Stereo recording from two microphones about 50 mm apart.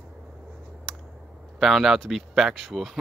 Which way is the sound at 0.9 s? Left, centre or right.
Centre.